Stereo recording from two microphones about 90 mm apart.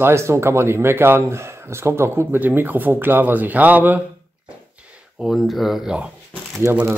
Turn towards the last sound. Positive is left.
turn(degrees=-30)  # may be behind; listen again after turning